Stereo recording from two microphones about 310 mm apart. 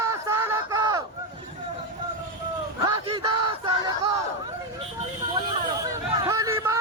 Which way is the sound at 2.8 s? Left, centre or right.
Centre.